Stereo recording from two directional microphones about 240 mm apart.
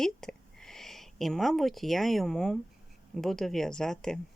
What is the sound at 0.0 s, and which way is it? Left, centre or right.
Speech, centre.